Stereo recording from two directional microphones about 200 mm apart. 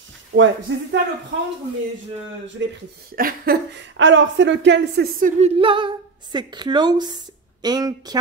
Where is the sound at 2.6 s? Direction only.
65° right (ahead or behind).